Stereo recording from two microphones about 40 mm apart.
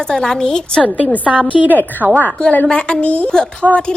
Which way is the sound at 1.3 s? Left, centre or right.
Right.